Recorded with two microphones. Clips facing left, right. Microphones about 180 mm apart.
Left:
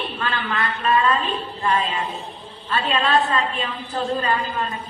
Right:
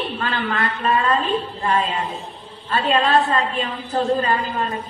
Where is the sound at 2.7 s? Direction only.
40° right (ahead or behind).